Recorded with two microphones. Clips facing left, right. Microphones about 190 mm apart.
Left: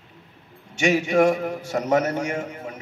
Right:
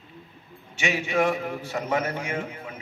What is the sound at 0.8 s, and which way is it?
A man's voice, 40° left (ahead or behind).